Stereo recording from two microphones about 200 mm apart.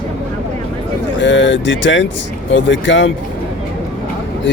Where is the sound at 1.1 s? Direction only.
65° left (ahead or behind).